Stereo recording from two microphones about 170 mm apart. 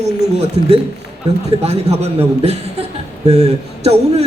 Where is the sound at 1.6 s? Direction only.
40° right (ahead or behind).